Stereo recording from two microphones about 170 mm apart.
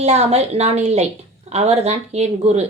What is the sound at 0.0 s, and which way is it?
Speech, 40° right (ahead or behind).